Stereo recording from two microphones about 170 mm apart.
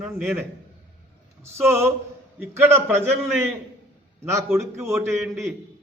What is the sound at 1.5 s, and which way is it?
A man's voice, 15° right (ahead or behind).